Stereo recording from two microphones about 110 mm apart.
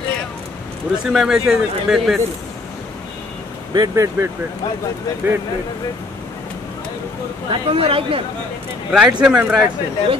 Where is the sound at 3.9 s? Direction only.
25° right (ahead or behind).